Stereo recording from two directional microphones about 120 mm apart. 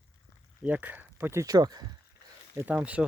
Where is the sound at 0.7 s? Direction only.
15° right (ahead or behind); by 1.9 s 35° right (ahead or behind).